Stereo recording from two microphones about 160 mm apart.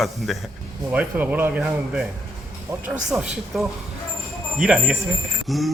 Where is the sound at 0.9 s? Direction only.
10° right (ahead or behind).